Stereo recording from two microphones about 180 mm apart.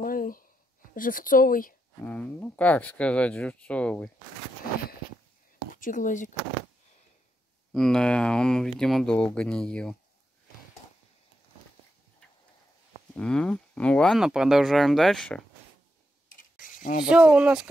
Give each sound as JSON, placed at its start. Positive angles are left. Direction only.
{"t": 0.0, "sound": "a sound", "side_deg": 50}
{"t": 0.9, "sound": "speech", "side_deg": 50}
{"t": 2.0, "sound": "speech", "side_deg": 10}
{"t": 5.8, "sound": "speech", "side_deg": 45}
{"t": 7.7, "sound": "speech", "side_deg": 5}
{"t": 13.1, "sound": "speech", "side_deg": 5}
{"t": 16.3, "sound": "mechanisms", "side_deg": 50}
{"t": 17.1, "sound": "speech", "side_deg": -5}